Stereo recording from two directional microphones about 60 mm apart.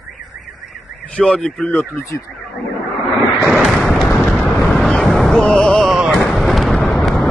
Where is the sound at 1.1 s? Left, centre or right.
Centre.